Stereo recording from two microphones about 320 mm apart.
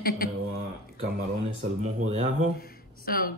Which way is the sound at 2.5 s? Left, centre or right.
Left.